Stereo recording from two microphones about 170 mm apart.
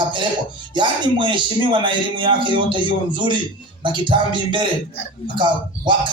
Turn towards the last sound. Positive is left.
turn(degrees=-30)  # may be behind; listen again after turning